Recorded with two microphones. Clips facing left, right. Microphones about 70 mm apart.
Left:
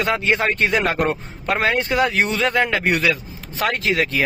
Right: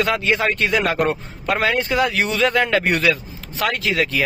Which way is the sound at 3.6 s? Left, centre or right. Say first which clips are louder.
Even; left.